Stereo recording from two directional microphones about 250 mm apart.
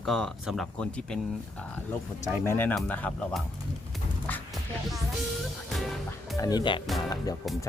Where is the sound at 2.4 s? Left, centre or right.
Centre.